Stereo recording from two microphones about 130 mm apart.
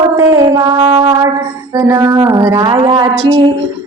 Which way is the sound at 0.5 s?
30° right (ahead or behind).